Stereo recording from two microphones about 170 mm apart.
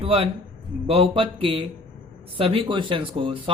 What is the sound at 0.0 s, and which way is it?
A man's voice, 35° right (ahead or behind).